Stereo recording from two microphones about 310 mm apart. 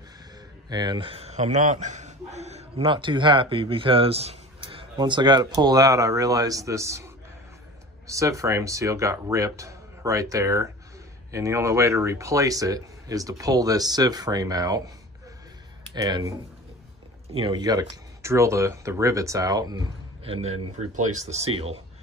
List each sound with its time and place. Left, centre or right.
0.7 s a man's voice: centre
8.1 s a man's voice: centre
15.9 s a man's voice: centre